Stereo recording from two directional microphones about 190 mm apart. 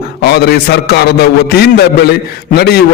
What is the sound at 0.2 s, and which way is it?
A man's voice, 55° left (ahead or behind).